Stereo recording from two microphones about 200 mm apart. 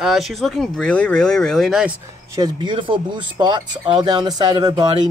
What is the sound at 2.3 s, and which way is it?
Speech, 20° right (ahead or behind).